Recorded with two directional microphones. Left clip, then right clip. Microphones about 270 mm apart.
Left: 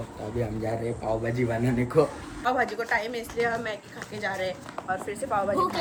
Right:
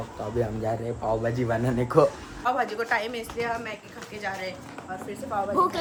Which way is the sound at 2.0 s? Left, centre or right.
Centre.